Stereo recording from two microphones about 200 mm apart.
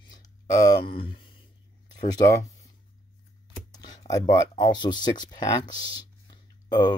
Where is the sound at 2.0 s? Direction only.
20° left (ahead or behind).